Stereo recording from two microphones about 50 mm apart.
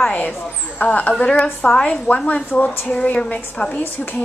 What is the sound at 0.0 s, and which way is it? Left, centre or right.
A woman's voice, left.